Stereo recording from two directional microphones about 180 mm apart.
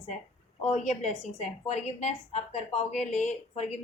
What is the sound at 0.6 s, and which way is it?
A woman's voice, 40° left (ahead or behind).